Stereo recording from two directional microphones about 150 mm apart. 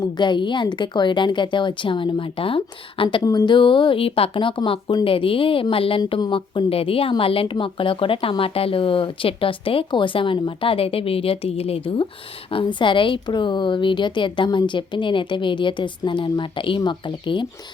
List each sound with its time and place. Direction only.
0.0 s speech: 30° left (ahead or behind)